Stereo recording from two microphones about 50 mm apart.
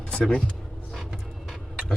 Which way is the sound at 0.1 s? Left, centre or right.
Left.